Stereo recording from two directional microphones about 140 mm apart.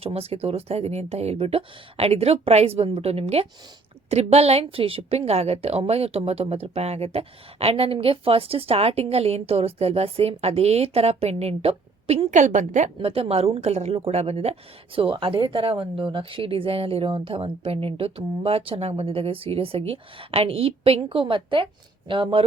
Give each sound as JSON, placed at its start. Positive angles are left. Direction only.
{"t": 0.0, "sound": "a woman's voice", "side_deg": -45}
{"t": 13.0, "sound": "a woman's voice", "side_deg": -45}